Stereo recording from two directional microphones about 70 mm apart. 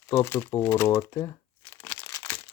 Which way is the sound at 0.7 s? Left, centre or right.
Left.